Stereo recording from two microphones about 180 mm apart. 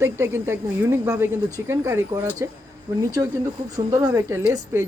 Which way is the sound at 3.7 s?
20° right (ahead or behind).